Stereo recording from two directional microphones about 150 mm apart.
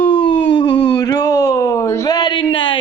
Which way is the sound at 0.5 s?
30° left (ahead or behind).